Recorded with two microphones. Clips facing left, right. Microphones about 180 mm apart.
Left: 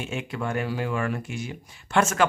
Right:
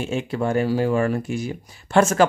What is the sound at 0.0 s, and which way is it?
Speech, 35° right (ahead or behind).